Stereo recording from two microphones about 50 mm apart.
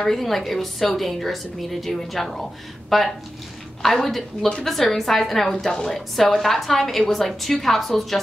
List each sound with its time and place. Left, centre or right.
0.0 s a woman's voice: centre